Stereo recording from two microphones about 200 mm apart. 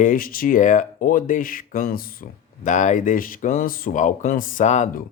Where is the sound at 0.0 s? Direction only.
45° left (ahead or behind).